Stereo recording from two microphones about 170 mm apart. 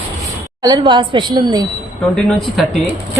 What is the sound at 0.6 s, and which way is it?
A woman's voice, 25° right (ahead or behind).